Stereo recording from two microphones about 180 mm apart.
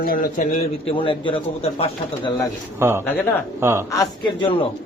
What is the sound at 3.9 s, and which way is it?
Speech, 20° left (ahead or behind).